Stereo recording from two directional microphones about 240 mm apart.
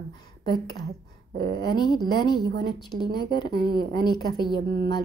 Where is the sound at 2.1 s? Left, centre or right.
Centre.